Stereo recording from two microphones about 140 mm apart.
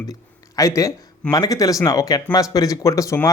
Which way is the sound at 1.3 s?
25° left (ahead or behind).